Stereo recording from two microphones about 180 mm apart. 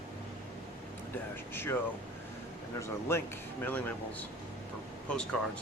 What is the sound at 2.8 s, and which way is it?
Speech, 15° left (ahead or behind).